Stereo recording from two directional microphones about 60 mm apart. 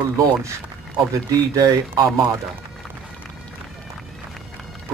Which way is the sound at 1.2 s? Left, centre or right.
Right.